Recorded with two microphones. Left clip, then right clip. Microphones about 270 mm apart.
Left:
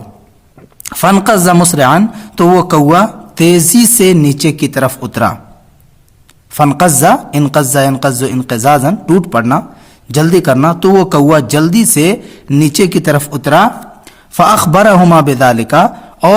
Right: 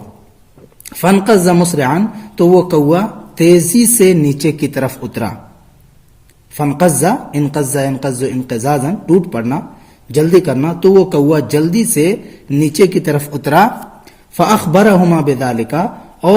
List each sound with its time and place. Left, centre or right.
0.8 s a woman's voice: left
6.6 s a woman's voice: left
14.3 s a woman's voice: left